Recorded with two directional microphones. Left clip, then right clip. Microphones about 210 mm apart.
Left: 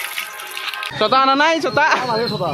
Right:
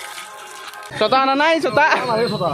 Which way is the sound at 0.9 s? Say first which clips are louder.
Left 1 dB; centre (ahead or behind).